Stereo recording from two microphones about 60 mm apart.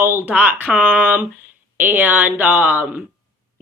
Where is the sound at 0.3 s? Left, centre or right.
Right.